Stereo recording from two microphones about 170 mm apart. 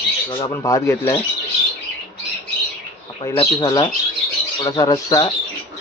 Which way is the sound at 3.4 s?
25° left (ahead or behind).